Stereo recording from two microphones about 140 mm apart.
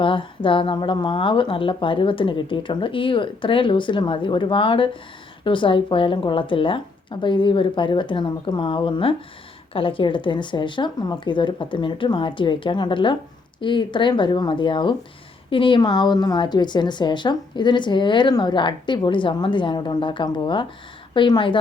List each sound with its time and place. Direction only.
0.0 s a woman's voice: 35° left (ahead or behind)